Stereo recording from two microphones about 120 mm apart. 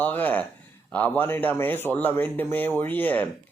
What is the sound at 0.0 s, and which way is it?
A man's voice, 15° left (ahead or behind).